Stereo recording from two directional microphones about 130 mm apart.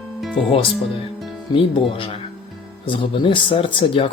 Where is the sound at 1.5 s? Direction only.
40° left (ahead or behind).